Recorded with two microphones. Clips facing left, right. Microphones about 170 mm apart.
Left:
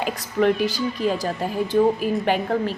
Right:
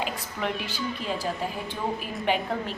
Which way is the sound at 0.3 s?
45° left (ahead or behind).